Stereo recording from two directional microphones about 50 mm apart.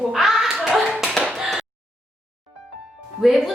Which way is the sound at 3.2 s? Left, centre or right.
Centre.